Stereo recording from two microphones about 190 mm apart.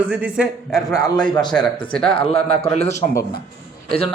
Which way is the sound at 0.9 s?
20° left (ahead or behind).